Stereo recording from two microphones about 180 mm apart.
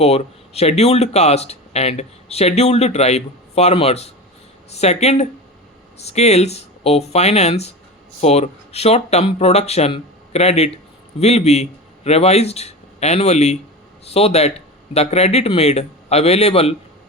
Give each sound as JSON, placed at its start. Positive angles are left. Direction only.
{"t": 0.0, "sound": "speech", "side_deg": 35}